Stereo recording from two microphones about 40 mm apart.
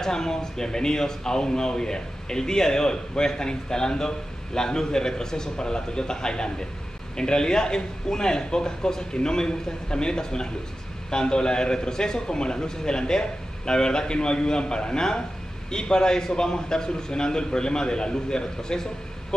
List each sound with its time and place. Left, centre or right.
0.0 s a man's voice: centre